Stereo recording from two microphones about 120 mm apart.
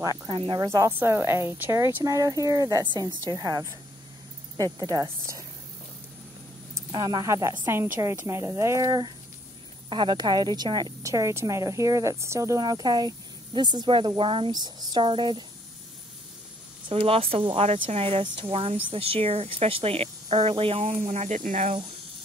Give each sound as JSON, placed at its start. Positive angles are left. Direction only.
{"t": 0.0, "sound": "speech", "side_deg": -30}
{"t": 0.3, "sound": "speech", "side_deg": -45}
{"t": 0.7, "sound": "a woman's voice", "side_deg": -30}
{"t": 6.7, "sound": "a woman's voice", "side_deg": -35}
{"t": 16.9, "sound": "speech", "side_deg": -50}
{"t": 18.2, "sound": "speech", "side_deg": -45}